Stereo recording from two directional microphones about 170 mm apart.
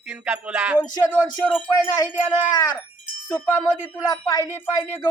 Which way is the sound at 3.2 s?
15° left (ahead or behind).